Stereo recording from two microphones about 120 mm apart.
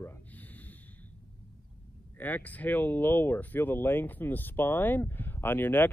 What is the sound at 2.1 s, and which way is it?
Speech, 15° left (ahead or behind).